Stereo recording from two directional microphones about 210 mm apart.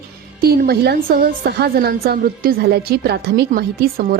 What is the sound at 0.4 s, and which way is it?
A woman's voice, 45° right (ahead or behind).